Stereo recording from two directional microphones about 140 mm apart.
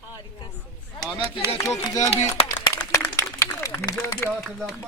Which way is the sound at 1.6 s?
25° left (ahead or behind).